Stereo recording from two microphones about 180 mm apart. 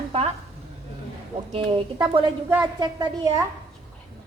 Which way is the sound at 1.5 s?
25° right (ahead or behind).